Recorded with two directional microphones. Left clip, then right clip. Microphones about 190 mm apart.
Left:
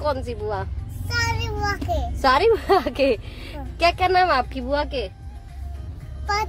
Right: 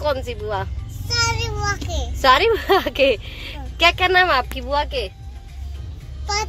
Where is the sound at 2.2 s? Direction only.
Centre (ahead or behind).